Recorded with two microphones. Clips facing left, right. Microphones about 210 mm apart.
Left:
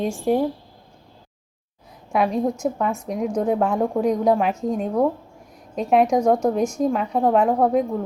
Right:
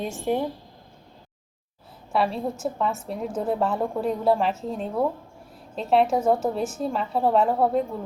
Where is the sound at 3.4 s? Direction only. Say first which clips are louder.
Left 3 dB; 10° left (ahead or behind).